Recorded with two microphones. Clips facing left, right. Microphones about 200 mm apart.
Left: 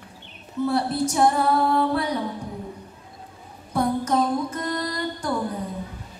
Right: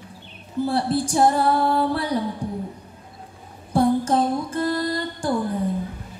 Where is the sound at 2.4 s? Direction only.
30° right (ahead or behind).